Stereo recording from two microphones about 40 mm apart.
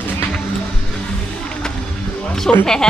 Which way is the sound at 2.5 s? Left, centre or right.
Left.